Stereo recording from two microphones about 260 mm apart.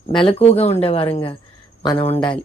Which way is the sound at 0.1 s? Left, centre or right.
Centre.